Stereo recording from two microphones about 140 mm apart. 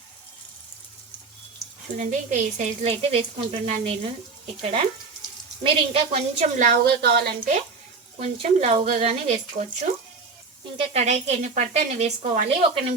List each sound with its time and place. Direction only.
2.0 s speech: 55° right (ahead or behind)
6.6 s speech: 85° right
8.2 s speech: 50° right (ahead or behind)